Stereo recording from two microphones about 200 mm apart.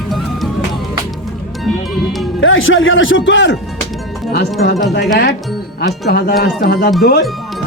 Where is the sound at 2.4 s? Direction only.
80° left; by 3.6 s 65° left (ahead or behind).